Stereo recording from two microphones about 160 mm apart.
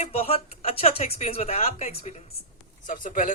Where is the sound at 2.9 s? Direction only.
55° left (ahead or behind).